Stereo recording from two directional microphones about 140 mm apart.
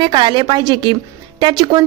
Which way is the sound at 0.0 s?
35° right (ahead or behind).